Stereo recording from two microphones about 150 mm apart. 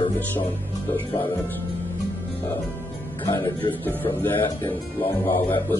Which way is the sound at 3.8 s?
15° left (ahead or behind).